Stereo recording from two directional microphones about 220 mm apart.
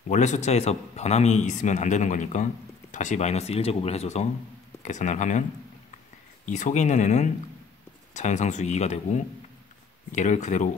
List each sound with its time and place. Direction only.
0.1 s a man's voice: 30° left (ahead or behind)
6.4 s a man's voice: 35° left (ahead or behind)